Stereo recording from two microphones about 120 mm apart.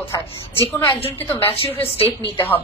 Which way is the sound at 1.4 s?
50° left (ahead or behind).